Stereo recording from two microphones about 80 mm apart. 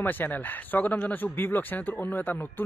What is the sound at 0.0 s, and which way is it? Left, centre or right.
Speech, left.